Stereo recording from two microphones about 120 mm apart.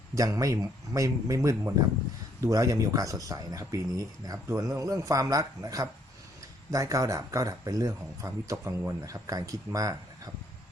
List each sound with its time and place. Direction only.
0.1 s speech: 30° right (ahead or behind)